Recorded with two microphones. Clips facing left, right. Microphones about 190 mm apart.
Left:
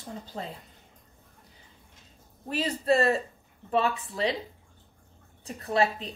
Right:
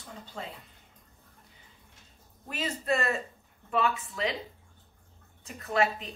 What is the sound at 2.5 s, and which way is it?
A woman's voice, 35° left (ahead or behind).